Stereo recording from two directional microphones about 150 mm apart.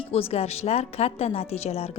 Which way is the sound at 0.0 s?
40° left (ahead or behind).